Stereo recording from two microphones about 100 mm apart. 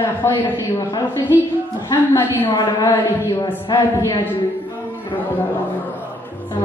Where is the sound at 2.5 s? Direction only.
40° left (ahead or behind).